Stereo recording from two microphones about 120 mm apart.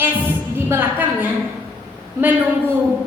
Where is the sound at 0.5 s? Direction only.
20° right (ahead or behind).